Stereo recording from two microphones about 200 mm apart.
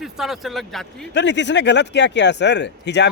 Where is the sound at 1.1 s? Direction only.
60° left (ahead or behind).